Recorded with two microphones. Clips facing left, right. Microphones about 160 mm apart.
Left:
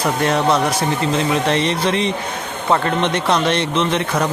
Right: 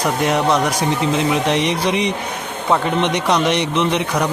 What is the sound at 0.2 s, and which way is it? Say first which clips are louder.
Speech: even; 15° right (ahead or behind).